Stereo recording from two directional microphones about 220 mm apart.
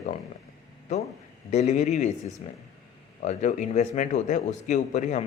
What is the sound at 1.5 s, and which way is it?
Speech, 30° left (ahead or behind).